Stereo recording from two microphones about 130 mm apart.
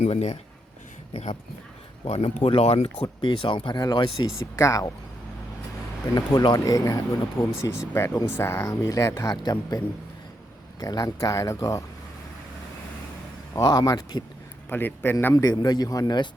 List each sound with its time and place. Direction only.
0.0 s speech: 55° left (ahead or behind)
2.0 s speech: 50° left (ahead or behind)
4.5 s a man's voice: 25° left (ahead or behind)
6.1 s a man's voice: 30° left (ahead or behind)
13.5 s speech: 30° left (ahead or behind)
14.7 s a man's voice: 15° left (ahead or behind); by 16.3 s 35° left (ahead or behind)